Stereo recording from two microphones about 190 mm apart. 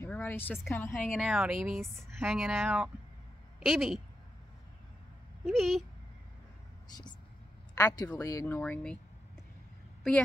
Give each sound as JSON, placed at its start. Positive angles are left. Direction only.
{"t": 0.0, "sound": "a woman's voice", "side_deg": 10}
{"t": 1.1, "sound": "speech", "side_deg": -5}
{"t": 5.4, "sound": "speech", "side_deg": 0}
{"t": 7.7, "sound": "a woman's voice", "side_deg": 20}